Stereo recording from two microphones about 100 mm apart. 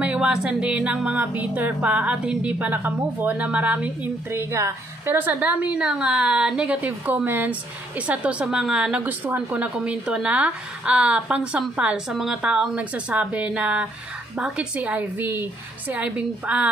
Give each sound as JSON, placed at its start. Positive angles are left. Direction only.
{"t": 0.0, "sound": "a woman's voice", "side_deg": -10}
{"t": 4.3, "sound": "a woman's voice", "side_deg": -25}